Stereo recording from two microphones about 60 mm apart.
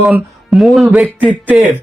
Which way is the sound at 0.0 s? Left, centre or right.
Centre.